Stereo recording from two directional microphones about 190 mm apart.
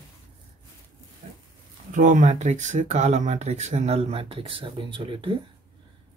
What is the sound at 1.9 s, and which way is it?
Speech, 45° right (ahead or behind).